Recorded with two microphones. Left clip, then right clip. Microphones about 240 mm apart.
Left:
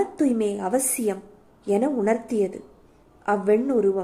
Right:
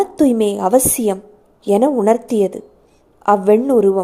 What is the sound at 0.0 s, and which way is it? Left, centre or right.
A woman's voice, right.